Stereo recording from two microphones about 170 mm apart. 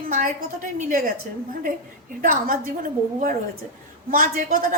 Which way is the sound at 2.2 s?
50° right (ahead or behind).